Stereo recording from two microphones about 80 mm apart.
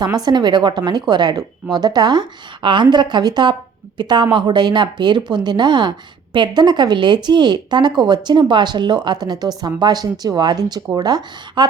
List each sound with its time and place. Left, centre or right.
0.3 s speech: right